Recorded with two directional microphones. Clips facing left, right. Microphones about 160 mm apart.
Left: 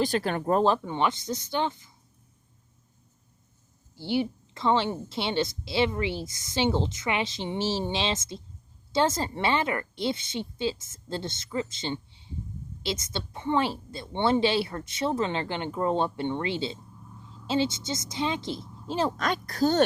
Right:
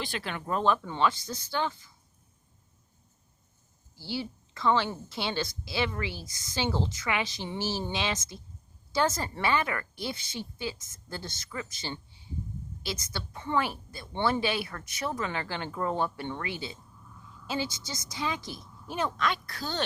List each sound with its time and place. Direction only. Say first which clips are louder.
0.0 s speech: left 9 dB; 40° left (ahead or behind)
0.8 s a woman's voice: left 1 dB; 20° left (ahead or behind)
3.9 s a woman's voice: left 8 dB; 20° left (ahead or behind)
19.1 s speech: left 2 dB; 40° left (ahead or behind)